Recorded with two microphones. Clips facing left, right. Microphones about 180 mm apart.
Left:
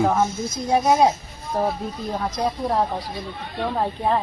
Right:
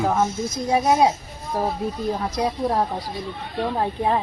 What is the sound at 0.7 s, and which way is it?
Speech, centre (ahead or behind).